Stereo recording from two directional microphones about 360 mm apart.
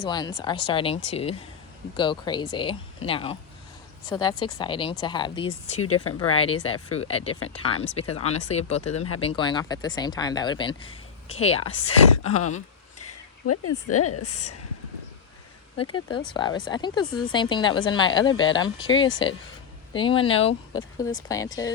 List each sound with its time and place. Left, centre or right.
0.0 s speech: centre
12.2 s a woman's voice: left
13.0 s a sound: left
13.8 s a woman's voice: left
15.8 s speech: centre